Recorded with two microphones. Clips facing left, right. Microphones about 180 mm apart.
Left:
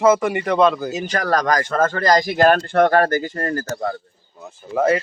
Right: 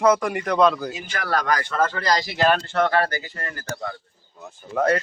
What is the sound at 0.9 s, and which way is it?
Speech, 40° left (ahead or behind).